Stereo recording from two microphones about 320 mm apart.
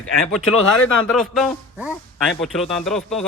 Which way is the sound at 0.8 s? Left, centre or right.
Left.